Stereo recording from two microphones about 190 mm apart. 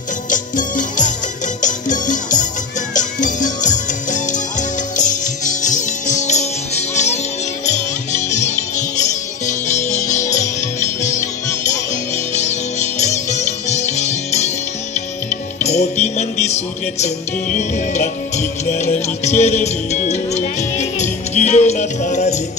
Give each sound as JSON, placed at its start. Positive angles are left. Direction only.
{"t": 0.3, "sound": "music", "side_deg": 40}